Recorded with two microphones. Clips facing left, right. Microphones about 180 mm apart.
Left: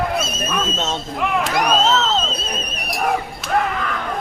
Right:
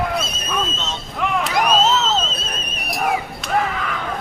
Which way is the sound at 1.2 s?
Centre (ahead or behind).